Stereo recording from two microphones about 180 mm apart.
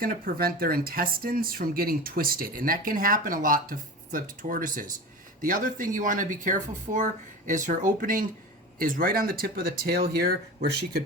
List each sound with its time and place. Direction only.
0.0 s speech: 55° right (ahead or behind)